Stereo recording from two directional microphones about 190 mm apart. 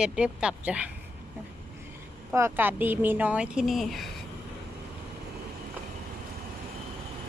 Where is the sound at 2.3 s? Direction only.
10° right (ahead or behind).